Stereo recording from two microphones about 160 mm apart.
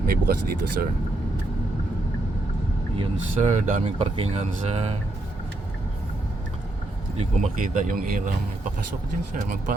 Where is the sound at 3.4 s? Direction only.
50° right (ahead or behind).